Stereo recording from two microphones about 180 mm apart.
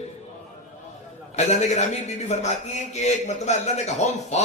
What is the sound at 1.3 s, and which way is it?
A man's voice, 40° left (ahead or behind).